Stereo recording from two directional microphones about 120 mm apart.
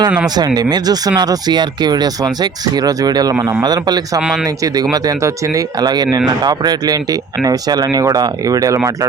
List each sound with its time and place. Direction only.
0.3 s speech: 35° right (ahead or behind)
4.2 s speech: 5° right (ahead or behind)
4.4 s speech: 30° right (ahead or behind)